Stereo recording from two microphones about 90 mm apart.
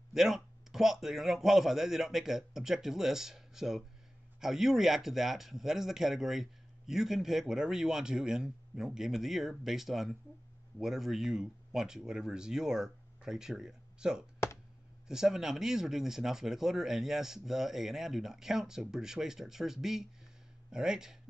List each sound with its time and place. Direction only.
0.1 s a man's voice: 5° right (ahead or behind)